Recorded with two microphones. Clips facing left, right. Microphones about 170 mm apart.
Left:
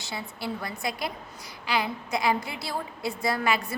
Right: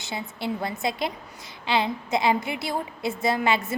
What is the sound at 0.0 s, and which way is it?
A woman's voice, 20° right (ahead or behind).